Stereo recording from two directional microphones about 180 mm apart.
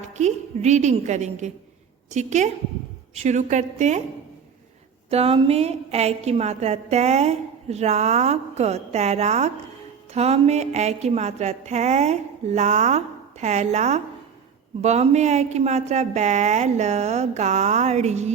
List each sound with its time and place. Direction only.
0.1 s a woman's voice: 40° right (ahead or behind)
5.1 s a woman's voice: 30° right (ahead or behind)